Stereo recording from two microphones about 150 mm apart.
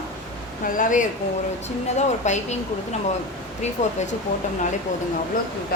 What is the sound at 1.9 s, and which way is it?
Speech, 50° left (ahead or behind).